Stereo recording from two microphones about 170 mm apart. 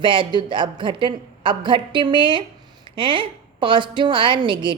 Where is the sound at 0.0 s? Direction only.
30° right (ahead or behind).